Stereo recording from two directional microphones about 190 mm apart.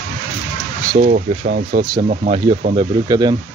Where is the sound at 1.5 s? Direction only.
55° right (ahead or behind).